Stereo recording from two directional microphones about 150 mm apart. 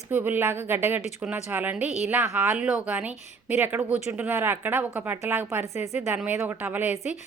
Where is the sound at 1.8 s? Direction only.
50° left (ahead or behind).